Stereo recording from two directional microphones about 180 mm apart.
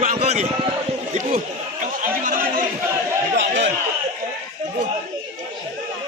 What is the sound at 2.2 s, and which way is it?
Speech, 50° right (ahead or behind).